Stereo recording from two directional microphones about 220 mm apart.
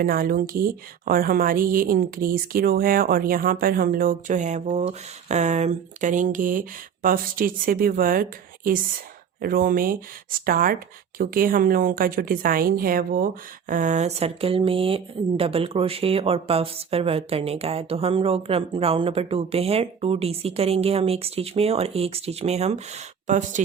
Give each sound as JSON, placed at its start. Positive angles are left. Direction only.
{"t": 0.0, "sound": "speech", "side_deg": -40}